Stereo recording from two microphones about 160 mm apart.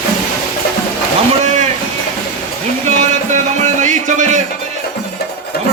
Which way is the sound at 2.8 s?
50° right (ahead or behind).